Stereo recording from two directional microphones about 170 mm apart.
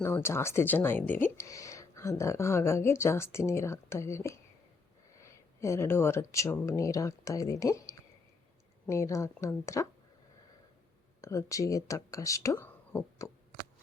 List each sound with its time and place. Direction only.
0.0 s speech: 15° left (ahead or behind)
11.2 s speech: 20° left (ahead or behind)